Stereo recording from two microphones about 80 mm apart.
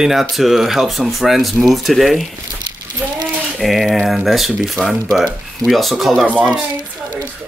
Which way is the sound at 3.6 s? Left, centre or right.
Centre.